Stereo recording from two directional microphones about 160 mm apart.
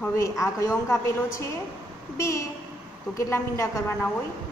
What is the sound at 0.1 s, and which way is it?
A woman's voice, 20° left (ahead or behind).